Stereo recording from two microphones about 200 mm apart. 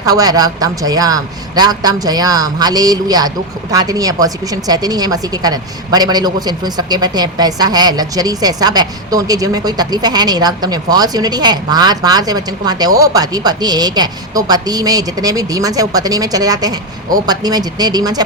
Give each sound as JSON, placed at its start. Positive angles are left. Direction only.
{"t": 0.0, "sound": "a man's voice", "side_deg": -20}